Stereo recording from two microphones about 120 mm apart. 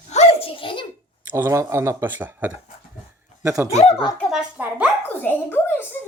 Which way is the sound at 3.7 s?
65° left (ahead or behind).